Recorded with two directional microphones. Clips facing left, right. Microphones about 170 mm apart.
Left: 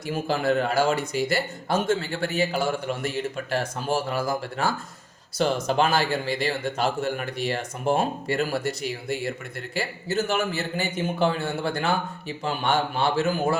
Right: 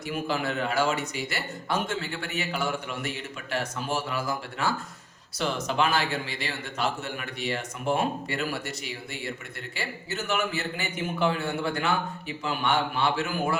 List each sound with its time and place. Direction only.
0.1 s a man's voice: 35° left (ahead or behind)